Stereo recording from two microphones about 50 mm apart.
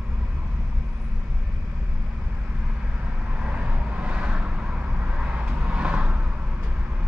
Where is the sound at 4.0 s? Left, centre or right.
Right.